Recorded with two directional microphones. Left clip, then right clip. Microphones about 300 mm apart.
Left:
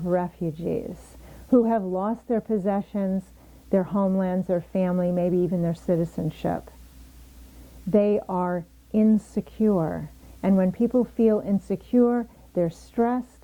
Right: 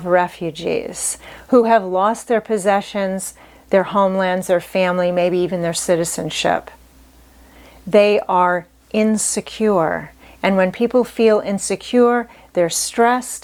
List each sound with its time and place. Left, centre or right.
0.0 s speech: centre
7.9 s speech: centre